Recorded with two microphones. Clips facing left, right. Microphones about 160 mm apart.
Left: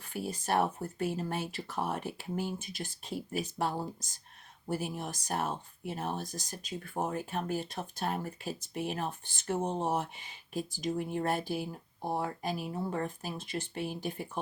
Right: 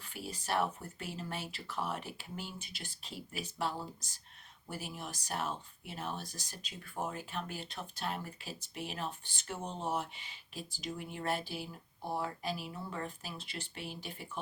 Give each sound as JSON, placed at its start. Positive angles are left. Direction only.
{"t": 0.1, "sound": "speech", "side_deg": 45}